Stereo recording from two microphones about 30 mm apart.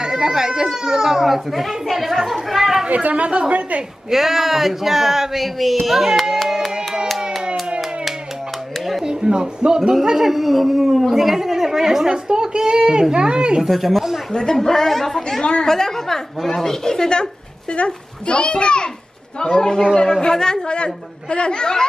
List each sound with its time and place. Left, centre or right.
0.1 s speech: centre
1.5 s speech: centre
2.9 s speech: right
4.1 s speech: centre
9.0 s a sound: right
10.1 s speech: centre
12.1 s a woman's voice: right
13.7 s speech: centre
14.3 s speech: centre
17.7 s a woman's voice: left
20.6 s a woman's voice: left